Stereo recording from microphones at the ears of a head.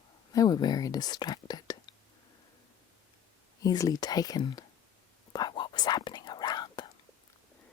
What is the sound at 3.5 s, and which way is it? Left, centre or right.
Speech, left.